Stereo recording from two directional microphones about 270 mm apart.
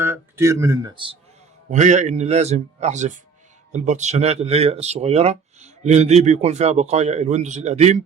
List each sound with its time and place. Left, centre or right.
0.0 s speech: centre
1.7 s speech: right